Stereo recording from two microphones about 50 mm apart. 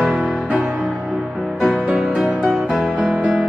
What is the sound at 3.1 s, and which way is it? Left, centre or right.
Music, right.